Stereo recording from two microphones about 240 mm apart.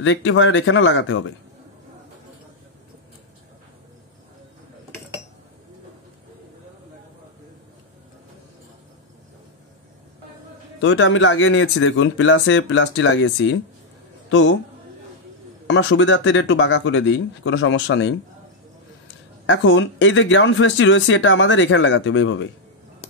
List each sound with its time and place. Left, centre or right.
0.0 s speech: left
10.8 s speech: left
15.6 s speech: left
19.4 s speech: left